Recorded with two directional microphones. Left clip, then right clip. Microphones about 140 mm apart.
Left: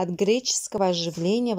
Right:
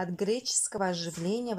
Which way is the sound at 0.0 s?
25° left (ahead or behind).